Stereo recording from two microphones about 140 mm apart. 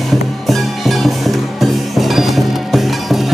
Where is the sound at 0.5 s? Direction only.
Centre (ahead or behind).